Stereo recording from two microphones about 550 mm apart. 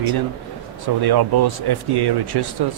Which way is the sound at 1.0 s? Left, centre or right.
Right.